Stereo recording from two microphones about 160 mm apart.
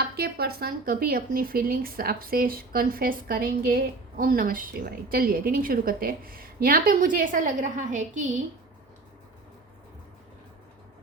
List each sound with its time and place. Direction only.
0.0 s speech: 75° right (ahead or behind); by 8.3 s 50° right (ahead or behind)